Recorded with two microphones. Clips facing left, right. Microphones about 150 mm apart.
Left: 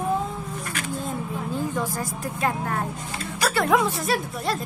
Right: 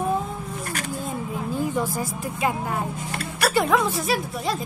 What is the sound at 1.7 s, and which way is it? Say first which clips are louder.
Speech: right 2 dB; 5° right (ahead or behind).